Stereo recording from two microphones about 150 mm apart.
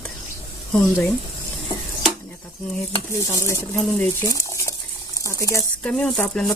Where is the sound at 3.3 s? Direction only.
20° left (ahead or behind).